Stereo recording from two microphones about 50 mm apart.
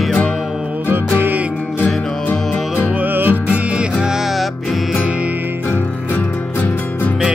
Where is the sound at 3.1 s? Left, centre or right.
Right.